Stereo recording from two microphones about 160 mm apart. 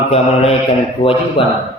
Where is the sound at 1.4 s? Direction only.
35° left (ahead or behind).